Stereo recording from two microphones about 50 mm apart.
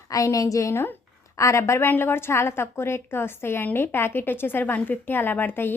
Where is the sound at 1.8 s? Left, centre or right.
Left.